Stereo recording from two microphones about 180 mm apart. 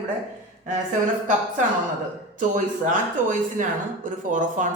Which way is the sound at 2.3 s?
45° right (ahead or behind).